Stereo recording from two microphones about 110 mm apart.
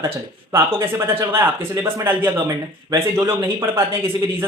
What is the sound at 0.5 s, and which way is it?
Speech, 25° right (ahead or behind).